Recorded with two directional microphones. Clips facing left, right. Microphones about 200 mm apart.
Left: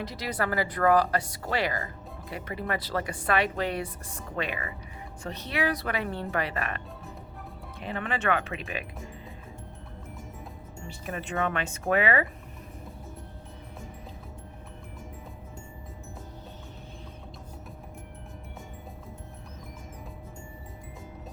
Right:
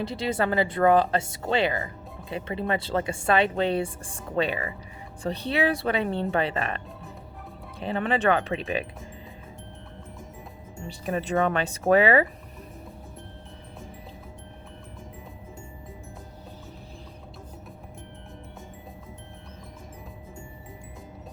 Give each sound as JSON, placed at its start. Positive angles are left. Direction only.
{"t": 0.0, "sound": "speech", "side_deg": -25}
{"t": 10.8, "sound": "speech", "side_deg": -35}